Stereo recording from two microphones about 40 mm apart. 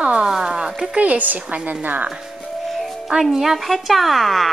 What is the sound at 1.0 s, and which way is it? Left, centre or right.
A woman's voice, right.